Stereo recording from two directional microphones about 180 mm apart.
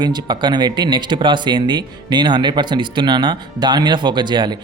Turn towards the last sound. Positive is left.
turn(degrees=-25)  # may be behind; listen again after turning